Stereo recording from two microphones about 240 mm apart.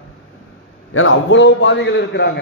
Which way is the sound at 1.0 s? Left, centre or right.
Left.